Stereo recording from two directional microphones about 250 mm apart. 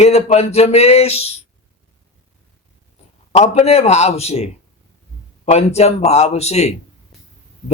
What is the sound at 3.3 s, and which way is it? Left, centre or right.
Speech, left.